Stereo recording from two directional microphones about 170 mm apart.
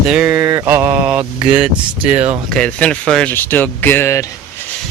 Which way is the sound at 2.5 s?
5° left (ahead or behind).